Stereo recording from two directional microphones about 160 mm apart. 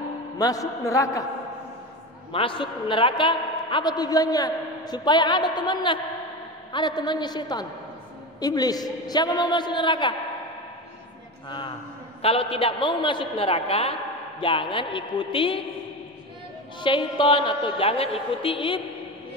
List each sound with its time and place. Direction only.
0.4 s a man's voice: 20° left (ahead or behind)
2.3 s a man's voice: 35° left (ahead or behind)
11.4 s a man's voice: 30° left (ahead or behind)
16.8 s a woman's voice: 30° left (ahead or behind)